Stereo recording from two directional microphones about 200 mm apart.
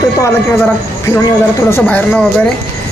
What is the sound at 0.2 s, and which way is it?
Speech, 10° left (ahead or behind).